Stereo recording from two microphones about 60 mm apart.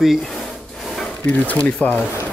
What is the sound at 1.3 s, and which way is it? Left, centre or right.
Speech, left.